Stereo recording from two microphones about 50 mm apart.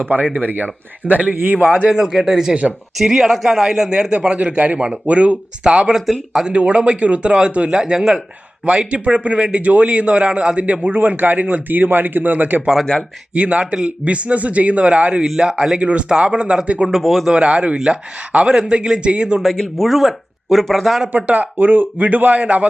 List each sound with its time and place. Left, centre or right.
0.3 s speech: right
2.0 s a man's voice: centre
8.6 s speech: right
10.8 s speech: right
15.4 s speech: centre
16.9 s speech: centre
17.3 s speech: right
19.5 s speech: centre
21.1 s speech: right